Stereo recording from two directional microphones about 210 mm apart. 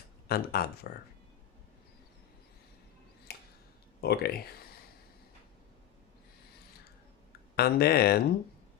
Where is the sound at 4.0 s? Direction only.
50° left (ahead or behind).